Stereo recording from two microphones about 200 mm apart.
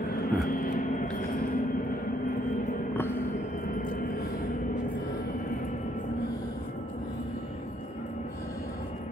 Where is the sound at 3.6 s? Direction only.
40° left (ahead or behind).